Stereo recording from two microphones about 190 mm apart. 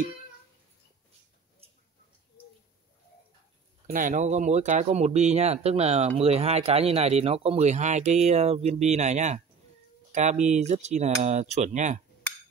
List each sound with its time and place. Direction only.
3.8 s speech: 45° right (ahead or behind)
10.4 s speech: 35° right (ahead or behind)